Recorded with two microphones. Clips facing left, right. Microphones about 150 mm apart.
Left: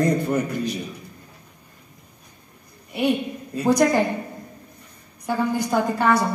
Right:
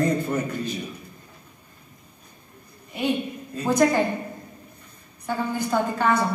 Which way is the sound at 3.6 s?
10° left (ahead or behind).